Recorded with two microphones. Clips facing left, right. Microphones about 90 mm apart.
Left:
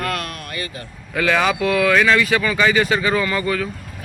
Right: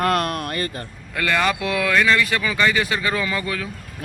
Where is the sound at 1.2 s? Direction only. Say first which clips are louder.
Left 3 dB; 5° left (ahead or behind).